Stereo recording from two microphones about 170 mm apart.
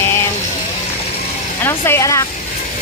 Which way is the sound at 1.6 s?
15° left (ahead or behind).